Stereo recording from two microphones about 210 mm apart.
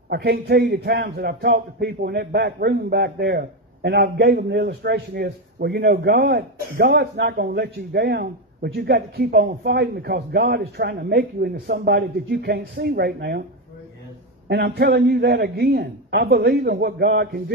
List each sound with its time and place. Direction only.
0.1 s a man's voice: 50° right (ahead or behind)
14.5 s a man's voice: 50° right (ahead or behind)